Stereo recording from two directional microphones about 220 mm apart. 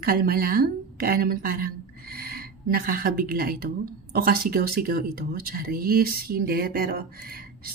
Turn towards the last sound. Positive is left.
turn(degrees=-45)  # may be behind; listen again after turning